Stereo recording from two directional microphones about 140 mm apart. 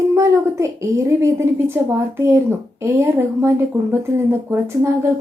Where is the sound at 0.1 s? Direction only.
20° right (ahead or behind).